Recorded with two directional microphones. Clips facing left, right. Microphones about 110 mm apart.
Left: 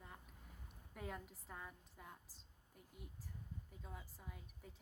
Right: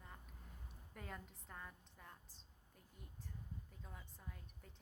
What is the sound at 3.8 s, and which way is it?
Speech, 5° left (ahead or behind).